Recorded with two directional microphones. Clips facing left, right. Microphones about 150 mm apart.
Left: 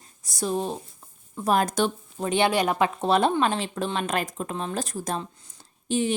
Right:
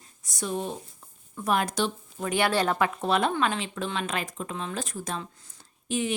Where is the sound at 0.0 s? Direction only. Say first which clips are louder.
Left 5 dB; 35° left (ahead or behind).